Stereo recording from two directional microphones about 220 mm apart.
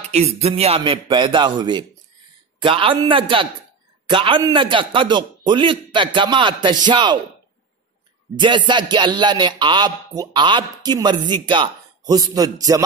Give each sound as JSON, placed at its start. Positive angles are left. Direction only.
{"t": 0.1, "sound": "speech", "side_deg": -30}
{"t": 8.4, "sound": "speech", "side_deg": -20}